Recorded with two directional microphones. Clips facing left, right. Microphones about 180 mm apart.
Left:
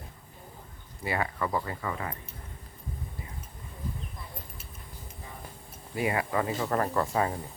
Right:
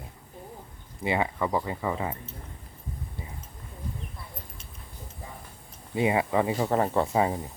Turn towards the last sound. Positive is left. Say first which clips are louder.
# right 3 dB
turn(degrees=-20)  # may be behind; listen again after turning